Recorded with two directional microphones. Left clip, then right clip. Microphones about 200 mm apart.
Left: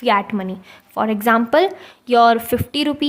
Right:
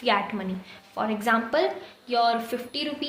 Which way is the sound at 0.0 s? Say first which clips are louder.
Left 7 dB; 45° left (ahead or behind).